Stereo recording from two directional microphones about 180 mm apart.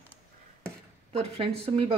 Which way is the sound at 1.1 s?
35° right (ahead or behind).